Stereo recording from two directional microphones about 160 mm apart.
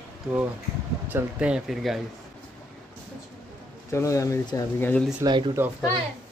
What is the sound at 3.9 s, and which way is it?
Speech, 20° left (ahead or behind).